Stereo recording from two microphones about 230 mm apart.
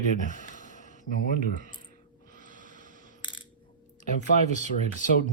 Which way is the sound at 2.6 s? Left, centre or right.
Left.